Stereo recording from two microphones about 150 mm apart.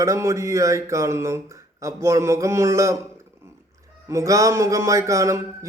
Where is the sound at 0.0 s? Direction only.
20° right (ahead or behind).